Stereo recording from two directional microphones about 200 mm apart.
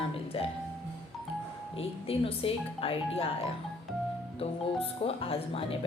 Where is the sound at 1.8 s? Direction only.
30° left (ahead or behind).